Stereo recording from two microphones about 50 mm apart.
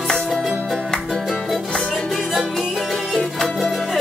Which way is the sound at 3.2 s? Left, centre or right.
Centre.